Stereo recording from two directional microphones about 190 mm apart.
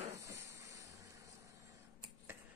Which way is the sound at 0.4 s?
15° right (ahead or behind).